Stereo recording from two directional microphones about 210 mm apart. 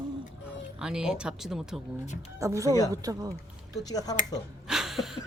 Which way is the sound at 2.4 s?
15° right (ahead or behind).